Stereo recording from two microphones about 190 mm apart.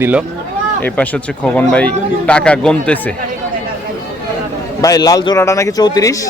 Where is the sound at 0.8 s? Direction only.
5° left (ahead or behind).